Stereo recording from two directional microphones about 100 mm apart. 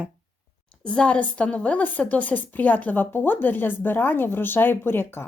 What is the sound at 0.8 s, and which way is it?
A woman's voice, 10° left (ahead or behind).